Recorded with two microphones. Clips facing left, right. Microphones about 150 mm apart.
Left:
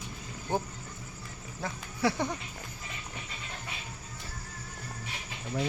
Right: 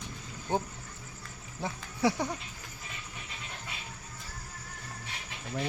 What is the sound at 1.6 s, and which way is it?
Speech, 20° right (ahead or behind).